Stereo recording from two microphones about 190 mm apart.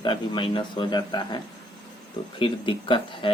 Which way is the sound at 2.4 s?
25° left (ahead or behind).